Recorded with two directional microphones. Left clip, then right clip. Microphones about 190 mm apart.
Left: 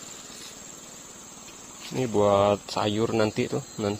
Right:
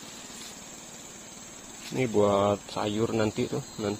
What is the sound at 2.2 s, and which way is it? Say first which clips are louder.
Speech: left 4 dB; 30° left (ahead or behind).